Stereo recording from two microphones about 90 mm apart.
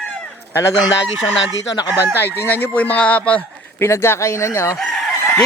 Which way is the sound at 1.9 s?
20° right (ahead or behind).